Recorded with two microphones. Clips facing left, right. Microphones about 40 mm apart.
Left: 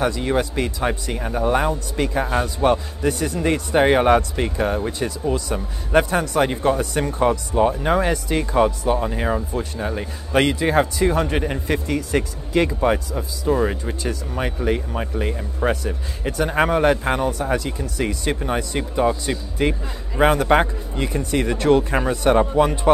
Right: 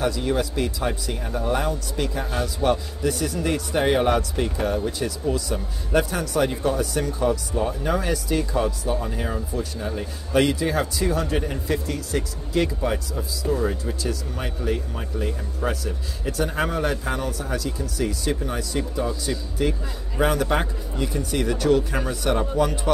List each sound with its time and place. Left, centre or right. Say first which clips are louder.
0.0 s a man's voice: left 3 dB; left
7.9 s a man's voice: left 4 dB; left